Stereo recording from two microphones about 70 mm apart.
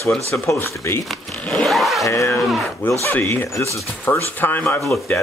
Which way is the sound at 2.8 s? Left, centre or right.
Left.